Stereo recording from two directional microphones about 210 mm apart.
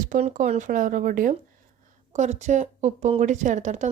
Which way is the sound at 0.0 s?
35° right (ahead or behind).